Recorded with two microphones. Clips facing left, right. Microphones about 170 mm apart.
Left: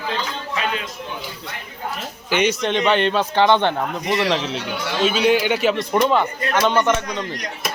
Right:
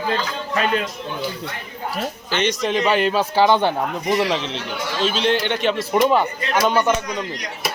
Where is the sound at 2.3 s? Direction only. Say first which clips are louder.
Left 3 dB; 10° left (ahead or behind).